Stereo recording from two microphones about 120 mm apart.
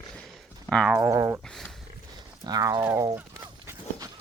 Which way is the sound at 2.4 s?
35° right (ahead or behind).